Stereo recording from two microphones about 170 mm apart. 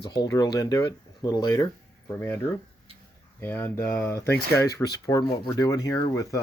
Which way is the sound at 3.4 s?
10° left (ahead or behind).